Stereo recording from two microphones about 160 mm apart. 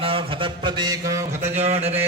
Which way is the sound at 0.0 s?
35° right (ahead or behind).